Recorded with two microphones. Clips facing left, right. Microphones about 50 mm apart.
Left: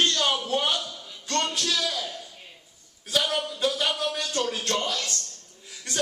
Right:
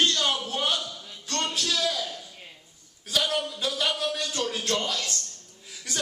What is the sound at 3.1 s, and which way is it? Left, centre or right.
Speech, centre.